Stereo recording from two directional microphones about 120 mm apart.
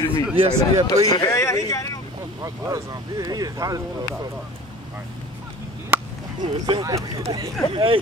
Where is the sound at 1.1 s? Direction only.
30° left (ahead or behind).